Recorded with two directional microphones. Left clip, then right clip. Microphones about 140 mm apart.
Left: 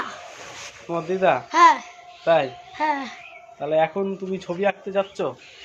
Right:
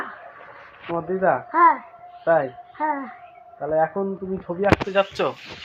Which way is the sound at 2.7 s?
60° left (ahead or behind).